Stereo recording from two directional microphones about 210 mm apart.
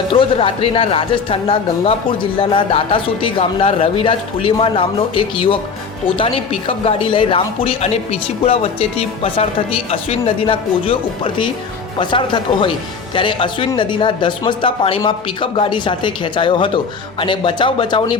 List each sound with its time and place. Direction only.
0.1 s speech: 25° left (ahead or behind)